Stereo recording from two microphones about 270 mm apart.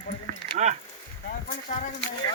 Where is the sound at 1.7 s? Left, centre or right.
Left.